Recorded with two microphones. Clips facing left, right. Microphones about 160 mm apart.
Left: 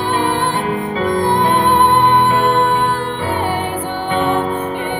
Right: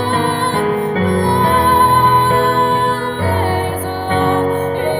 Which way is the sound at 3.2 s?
40° right (ahead or behind).